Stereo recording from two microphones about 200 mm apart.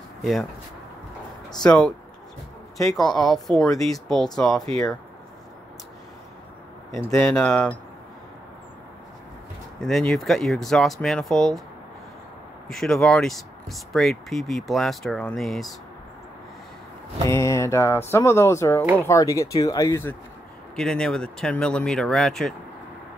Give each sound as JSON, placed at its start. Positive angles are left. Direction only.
{"t": 0.2, "sound": "speech", "side_deg": 0}
{"t": 1.6, "sound": "speech", "side_deg": 5}
{"t": 3.0, "sound": "speech", "side_deg": 0}
{"t": 7.0, "sound": "speech", "side_deg": 10}
{"t": 9.8, "sound": "speech", "side_deg": 0}
{"t": 12.6, "sound": "speech", "side_deg": 0}
{"t": 17.3, "sound": "speech", "side_deg": 15}